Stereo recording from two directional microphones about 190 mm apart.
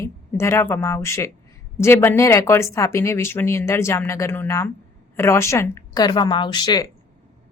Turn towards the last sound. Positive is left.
turn(degrees=20)  # may be behind; listen again after turning